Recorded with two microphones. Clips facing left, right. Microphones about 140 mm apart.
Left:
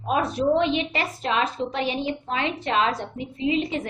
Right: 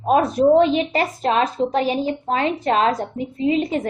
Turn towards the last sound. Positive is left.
turn(degrees=-40)  # may be behind; listen again after turning